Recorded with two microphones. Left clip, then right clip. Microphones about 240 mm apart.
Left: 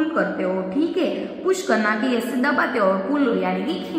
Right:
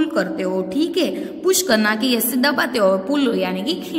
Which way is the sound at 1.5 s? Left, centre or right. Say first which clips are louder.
Right 3 dB; right.